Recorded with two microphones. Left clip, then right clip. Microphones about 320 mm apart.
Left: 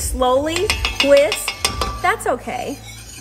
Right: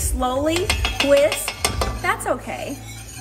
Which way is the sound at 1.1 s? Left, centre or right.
Centre.